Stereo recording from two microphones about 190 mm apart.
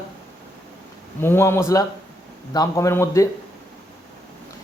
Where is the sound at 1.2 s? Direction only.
10° left (ahead or behind).